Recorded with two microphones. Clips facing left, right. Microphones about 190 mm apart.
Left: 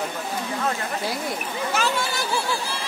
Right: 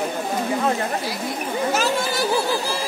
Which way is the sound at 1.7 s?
45° right (ahead or behind).